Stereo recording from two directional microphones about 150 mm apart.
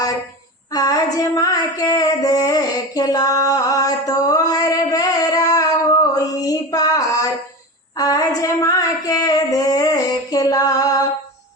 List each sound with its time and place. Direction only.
0.7 s female singing: 25° left (ahead or behind)
7.9 s child singing: 25° left (ahead or behind)
8.4 s female singing: 25° left (ahead or behind)